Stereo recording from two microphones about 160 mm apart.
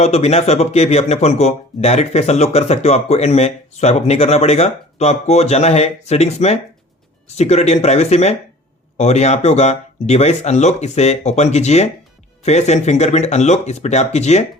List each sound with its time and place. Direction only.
0.0 s speech: 40° left (ahead or behind)